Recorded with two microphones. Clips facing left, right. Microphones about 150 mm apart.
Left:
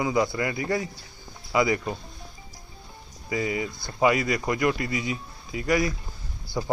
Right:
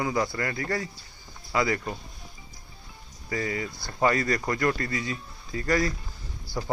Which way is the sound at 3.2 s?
15° left (ahead or behind).